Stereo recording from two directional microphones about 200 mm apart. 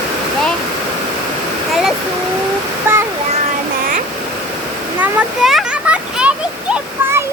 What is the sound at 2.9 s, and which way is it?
Waterfall, 10° right (ahead or behind).